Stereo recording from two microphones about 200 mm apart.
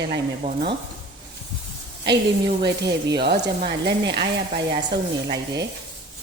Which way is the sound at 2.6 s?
55° right (ahead or behind).